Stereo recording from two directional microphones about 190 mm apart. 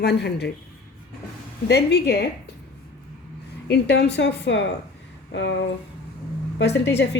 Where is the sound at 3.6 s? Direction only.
60° left (ahead or behind).